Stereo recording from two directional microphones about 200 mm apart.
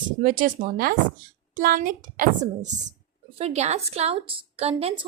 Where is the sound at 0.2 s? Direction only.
45° right (ahead or behind).